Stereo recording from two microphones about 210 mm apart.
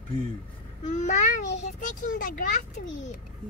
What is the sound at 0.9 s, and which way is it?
A child's voice, 35° left (ahead or behind).